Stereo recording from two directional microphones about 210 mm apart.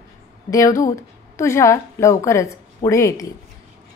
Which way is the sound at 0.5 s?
15° left (ahead or behind).